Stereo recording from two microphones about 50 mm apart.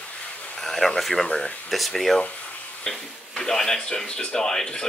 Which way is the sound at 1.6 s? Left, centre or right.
Centre.